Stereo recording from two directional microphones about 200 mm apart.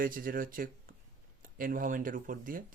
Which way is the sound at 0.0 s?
45° right (ahead or behind).